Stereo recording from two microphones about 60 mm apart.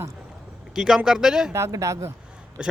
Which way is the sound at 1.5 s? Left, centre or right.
Right.